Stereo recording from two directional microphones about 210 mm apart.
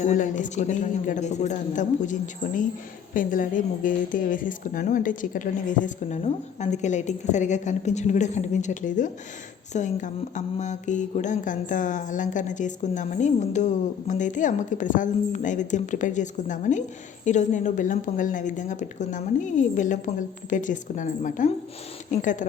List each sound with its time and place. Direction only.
0.0 s mantra: 35° left (ahead or behind)